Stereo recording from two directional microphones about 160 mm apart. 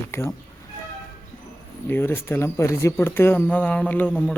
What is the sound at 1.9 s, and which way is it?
Speech, 15° left (ahead or behind).